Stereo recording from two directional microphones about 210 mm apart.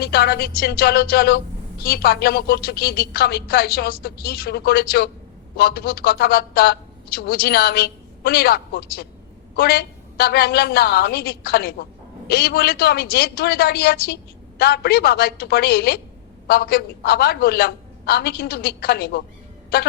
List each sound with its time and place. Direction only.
0.0 s a woman's voice: 50° left (ahead or behind)